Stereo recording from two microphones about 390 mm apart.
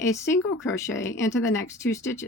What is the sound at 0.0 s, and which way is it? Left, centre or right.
Speech, centre.